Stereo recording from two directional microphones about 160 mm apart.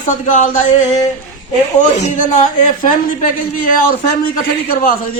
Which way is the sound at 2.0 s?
55° left (ahead or behind).